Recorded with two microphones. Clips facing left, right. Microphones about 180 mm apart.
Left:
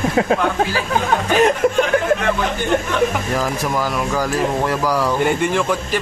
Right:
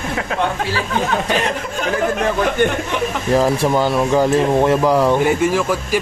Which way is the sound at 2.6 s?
60° right (ahead or behind).